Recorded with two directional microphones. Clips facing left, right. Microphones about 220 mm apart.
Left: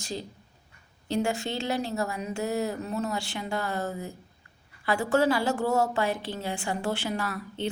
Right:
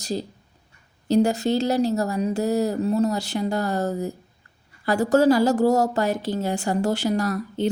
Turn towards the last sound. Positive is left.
turn(degrees=-40)  # may be behind; listen again after turning